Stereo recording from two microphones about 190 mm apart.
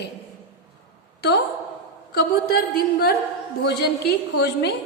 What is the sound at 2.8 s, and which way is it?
A woman's voice, 50° left (ahead or behind).